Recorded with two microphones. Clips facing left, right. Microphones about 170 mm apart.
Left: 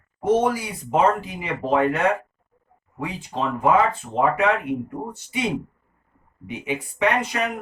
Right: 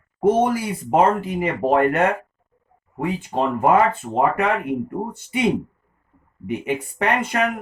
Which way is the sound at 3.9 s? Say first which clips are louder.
Right 2 dB; 55° right (ahead or behind).